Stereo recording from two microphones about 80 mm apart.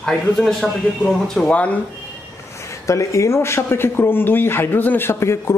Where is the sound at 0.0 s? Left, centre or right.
Centre.